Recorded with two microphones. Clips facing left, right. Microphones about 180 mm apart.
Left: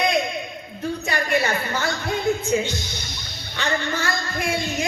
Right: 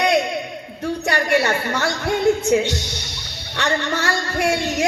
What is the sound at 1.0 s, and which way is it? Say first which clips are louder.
Speech: right 4 dB; 70° right (ahead or behind).